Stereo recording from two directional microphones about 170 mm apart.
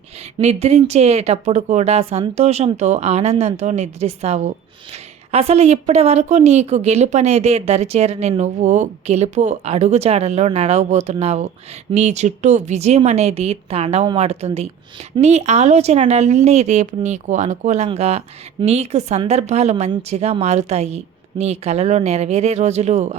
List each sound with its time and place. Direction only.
0.3 s a woman's voice: 40° right (ahead or behind)